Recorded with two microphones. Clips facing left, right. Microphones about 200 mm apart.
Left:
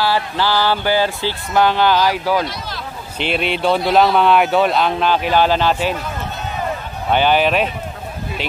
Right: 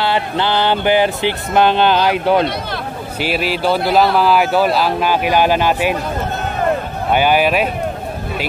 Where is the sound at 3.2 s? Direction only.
5° right (ahead or behind).